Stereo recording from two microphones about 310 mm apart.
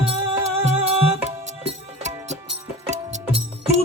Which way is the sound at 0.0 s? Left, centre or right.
Centre.